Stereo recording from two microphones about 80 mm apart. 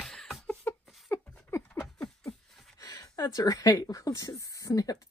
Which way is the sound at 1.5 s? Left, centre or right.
Left.